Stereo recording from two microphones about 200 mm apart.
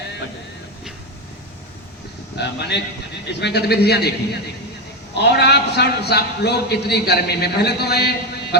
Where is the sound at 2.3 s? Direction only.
55° left (ahead or behind).